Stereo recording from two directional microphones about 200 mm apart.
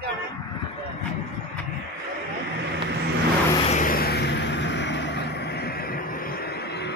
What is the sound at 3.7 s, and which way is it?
Vehicle, 40° left (ahead or behind).